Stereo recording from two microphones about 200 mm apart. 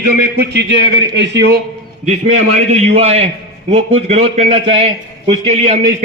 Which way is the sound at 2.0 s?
35° right (ahead or behind).